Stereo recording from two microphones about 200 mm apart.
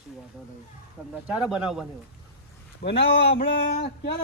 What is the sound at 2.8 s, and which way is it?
Speech, 55° left (ahead or behind).